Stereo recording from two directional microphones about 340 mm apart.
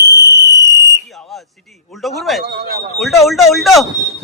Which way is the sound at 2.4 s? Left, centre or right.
Right.